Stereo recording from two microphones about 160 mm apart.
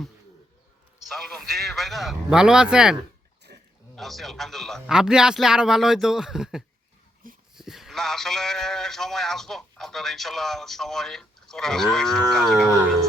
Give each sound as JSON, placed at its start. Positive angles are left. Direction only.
{"t": 1.0, "sound": "speech", "side_deg": 0}
{"t": 3.5, "sound": "a sound", "side_deg": -75}
{"t": 3.9, "sound": "speech", "side_deg": 0}